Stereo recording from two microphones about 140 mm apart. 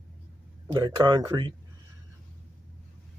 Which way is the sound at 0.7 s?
25° right (ahead or behind).